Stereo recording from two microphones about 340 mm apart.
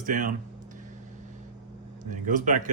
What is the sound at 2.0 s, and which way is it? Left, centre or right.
Speech, right.